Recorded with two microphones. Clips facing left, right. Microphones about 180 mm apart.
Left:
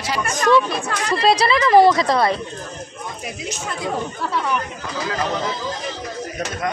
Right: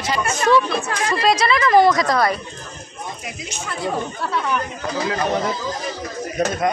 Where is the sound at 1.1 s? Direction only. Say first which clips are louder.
Left 2 dB; 35° left (ahead or behind).